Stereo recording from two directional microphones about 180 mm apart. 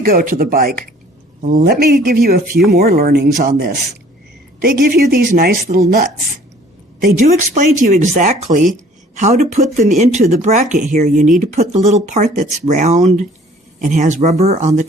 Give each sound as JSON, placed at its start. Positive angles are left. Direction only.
{"t": 0.0, "sound": "speech", "side_deg": -50}
{"t": 7.0, "sound": "speech", "side_deg": -45}